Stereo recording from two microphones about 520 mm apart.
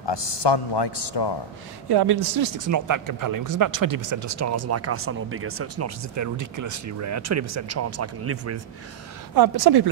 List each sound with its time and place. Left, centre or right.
0.0 s a man's voice: left
1.9 s speech: right
9.3 s a woman's voice: right